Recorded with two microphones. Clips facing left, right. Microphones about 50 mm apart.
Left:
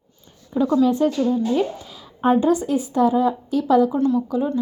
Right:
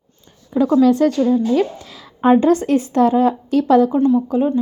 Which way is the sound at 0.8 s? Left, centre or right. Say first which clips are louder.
Right 6 dB; right.